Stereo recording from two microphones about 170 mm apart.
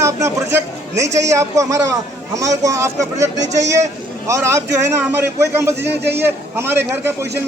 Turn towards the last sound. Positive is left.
turn(degrees=-15)  # may be behind; listen again after turning